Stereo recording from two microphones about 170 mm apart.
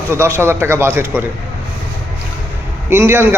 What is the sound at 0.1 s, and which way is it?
A man's voice, 15° right (ahead or behind).